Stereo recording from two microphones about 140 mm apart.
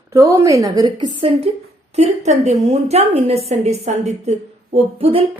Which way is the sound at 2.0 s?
55° right (ahead or behind).